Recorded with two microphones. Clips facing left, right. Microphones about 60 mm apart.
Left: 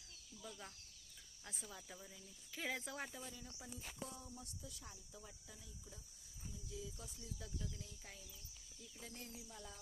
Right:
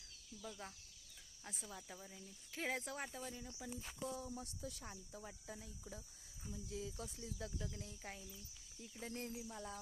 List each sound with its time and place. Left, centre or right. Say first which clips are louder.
1.5 s speech: right 2 dB; centre
2.1 s speech: right 5 dB; right
3.4 s speech: right 5 dB; right
4.1 s speech: right 7 dB; right
5.1 s speech: right 6 dB; right
6.7 s speech: right 4 dB; right
9.5 s speech: right 6 dB; right